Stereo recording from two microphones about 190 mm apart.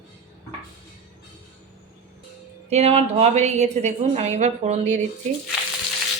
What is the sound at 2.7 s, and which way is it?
A woman's voice, 35° right (ahead or behind).